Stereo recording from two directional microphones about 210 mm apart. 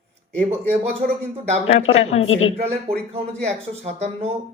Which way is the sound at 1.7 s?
30° left (ahead or behind).